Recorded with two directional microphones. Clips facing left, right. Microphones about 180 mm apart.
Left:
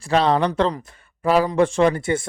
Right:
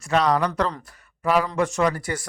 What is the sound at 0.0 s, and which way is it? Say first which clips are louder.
Speech: left 3 dB; 30° left (ahead or behind).